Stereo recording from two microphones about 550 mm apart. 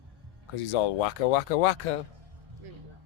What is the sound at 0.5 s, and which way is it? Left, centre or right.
Speech, left.